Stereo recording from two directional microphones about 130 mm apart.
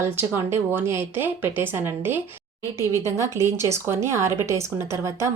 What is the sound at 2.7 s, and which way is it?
Speech, 25° left (ahead or behind).